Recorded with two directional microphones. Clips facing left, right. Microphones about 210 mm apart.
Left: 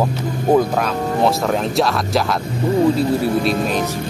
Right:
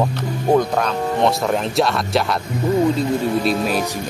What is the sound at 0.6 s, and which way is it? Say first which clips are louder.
Speech: left 1 dB; 5° left (ahead or behind).